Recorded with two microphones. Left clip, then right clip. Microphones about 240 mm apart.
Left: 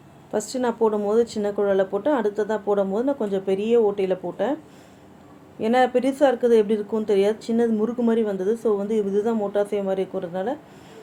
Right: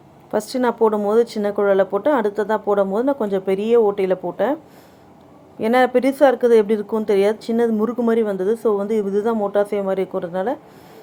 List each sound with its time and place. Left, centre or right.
0.3 s speech: centre
5.5 s speech: centre